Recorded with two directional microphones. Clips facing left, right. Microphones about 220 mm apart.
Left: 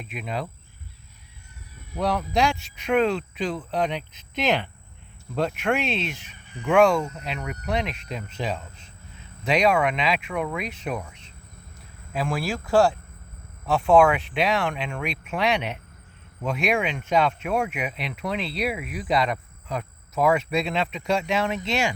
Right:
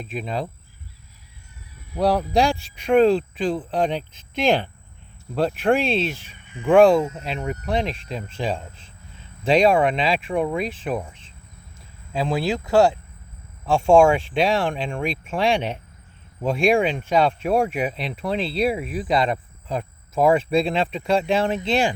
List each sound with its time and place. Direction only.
0.1 s speech: 30° right (ahead or behind)
2.0 s speech: 35° right (ahead or behind)
12.1 s speech: 20° right (ahead or behind)